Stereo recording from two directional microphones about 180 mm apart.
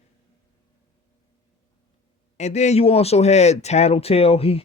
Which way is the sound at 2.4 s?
40° left (ahead or behind).